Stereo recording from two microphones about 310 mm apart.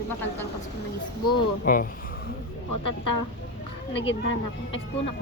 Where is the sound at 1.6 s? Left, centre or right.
Left.